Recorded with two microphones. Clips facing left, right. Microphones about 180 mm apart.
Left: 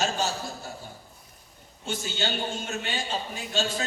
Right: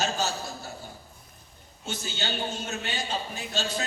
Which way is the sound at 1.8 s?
40° right (ahead or behind).